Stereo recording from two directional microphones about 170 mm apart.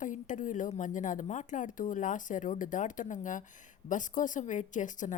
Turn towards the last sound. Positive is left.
turn(degrees=45)  # may be behind; listen again after turning